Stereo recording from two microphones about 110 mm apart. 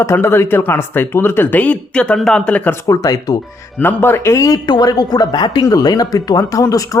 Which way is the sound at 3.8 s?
20° left (ahead or behind).